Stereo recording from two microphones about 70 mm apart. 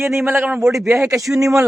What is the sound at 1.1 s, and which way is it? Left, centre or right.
Speech, centre.